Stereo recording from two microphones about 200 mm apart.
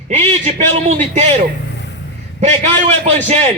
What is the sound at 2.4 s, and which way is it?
Speech, 35° right (ahead or behind).